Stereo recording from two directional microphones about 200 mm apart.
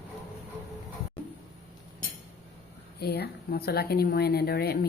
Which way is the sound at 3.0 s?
55° left (ahead or behind).